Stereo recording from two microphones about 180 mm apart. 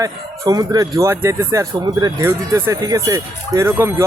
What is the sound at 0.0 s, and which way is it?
Speech, 20° right (ahead or behind).